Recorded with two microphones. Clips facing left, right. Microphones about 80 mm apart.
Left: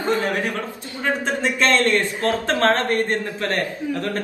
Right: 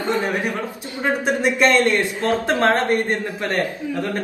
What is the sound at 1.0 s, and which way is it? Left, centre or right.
A man's voice, centre.